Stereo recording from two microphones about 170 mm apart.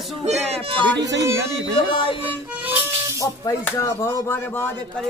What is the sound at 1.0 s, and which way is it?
Speech, 90° right.